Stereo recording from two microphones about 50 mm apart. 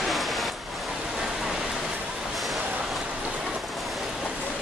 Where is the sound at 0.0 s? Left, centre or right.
Centre.